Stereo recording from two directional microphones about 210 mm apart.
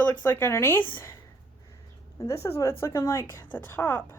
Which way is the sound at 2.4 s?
15° left (ahead or behind).